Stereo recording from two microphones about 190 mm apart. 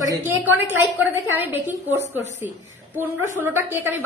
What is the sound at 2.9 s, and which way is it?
A woman's voice, 10° right (ahead or behind).